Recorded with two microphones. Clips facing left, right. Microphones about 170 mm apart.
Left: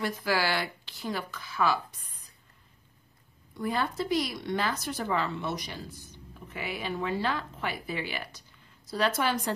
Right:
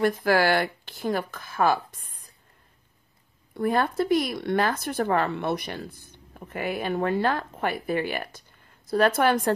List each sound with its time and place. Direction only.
0.0 s speech: 50° right (ahead or behind)
3.5 s speech: 55° right (ahead or behind)